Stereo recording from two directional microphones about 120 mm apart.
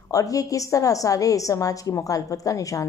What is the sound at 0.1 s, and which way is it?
A woman's voice, 30° left (ahead or behind).